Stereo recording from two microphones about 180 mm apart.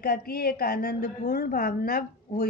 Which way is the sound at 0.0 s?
55° left (ahead or behind).